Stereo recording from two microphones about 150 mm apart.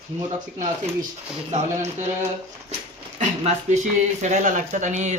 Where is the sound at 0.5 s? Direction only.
60° right (ahead or behind).